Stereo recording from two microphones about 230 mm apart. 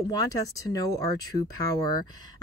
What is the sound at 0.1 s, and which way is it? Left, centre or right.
Speech, centre.